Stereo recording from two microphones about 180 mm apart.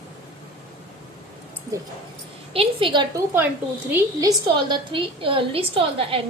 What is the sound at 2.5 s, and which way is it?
Speech, 30° right (ahead or behind).